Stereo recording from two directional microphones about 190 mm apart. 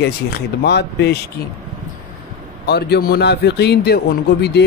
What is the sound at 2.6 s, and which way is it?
Speech, 60° left (ahead or behind).